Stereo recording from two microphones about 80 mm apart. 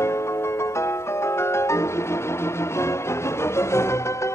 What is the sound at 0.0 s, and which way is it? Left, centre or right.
Music, left.